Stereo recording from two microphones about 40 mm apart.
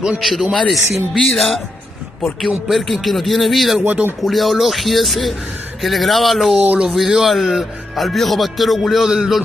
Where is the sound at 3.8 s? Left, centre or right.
Right.